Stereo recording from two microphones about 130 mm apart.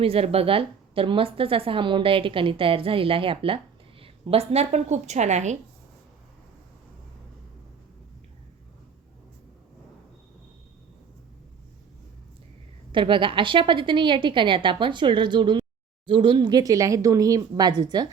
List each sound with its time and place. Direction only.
0.0 s a woman's voice: 50° right (ahead or behind)
12.9 s a woman's voice: 40° right (ahead or behind)